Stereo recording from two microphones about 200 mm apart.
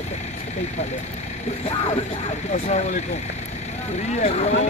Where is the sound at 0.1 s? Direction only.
35° left (ahead or behind).